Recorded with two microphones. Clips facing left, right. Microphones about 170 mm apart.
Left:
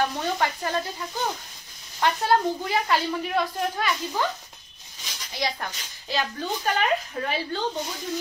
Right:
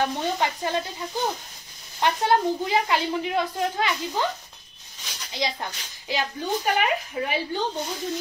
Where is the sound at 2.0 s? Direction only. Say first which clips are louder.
Right 1 dB; 20° right (ahead or behind).